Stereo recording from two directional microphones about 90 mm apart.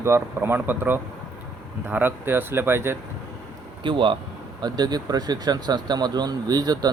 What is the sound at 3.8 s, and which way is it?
Speech, 65° right (ahead or behind).